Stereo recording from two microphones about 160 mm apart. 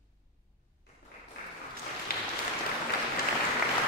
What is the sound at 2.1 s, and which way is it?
Applause, 70° left (ahead or behind).